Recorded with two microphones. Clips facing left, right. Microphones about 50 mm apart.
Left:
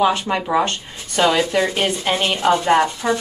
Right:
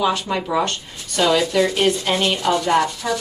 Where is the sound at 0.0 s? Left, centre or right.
Left.